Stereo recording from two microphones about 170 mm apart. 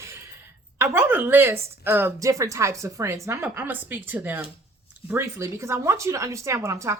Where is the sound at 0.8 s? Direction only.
15° right (ahead or behind).